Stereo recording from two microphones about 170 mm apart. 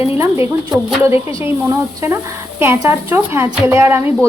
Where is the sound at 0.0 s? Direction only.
10° right (ahead or behind).